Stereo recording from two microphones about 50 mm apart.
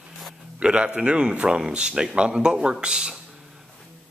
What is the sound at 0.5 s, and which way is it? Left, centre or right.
Speech, right.